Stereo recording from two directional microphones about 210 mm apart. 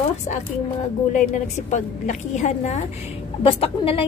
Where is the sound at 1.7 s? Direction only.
35° left (ahead or behind).